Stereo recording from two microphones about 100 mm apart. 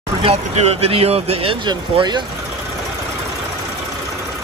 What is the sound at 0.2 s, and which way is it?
Speech, 90° right.